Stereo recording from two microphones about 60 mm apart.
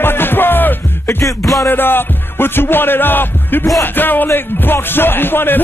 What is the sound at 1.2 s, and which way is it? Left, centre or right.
Music, left.